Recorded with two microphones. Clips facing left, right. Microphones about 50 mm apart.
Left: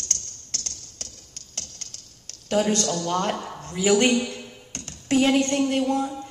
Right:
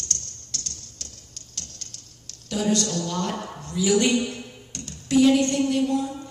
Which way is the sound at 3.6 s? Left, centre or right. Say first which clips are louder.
Left 1 dB; left.